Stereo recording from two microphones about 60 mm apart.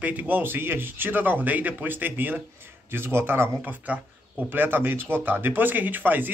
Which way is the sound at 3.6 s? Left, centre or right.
Right.